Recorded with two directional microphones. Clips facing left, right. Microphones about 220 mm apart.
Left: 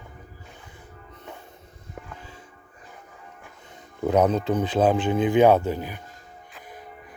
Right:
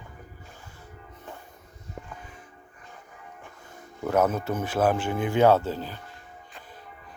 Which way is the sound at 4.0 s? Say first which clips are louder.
Left 3 dB; 20° left (ahead or behind).